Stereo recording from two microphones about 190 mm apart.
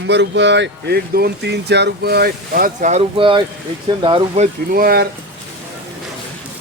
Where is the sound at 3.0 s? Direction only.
25° right (ahead or behind).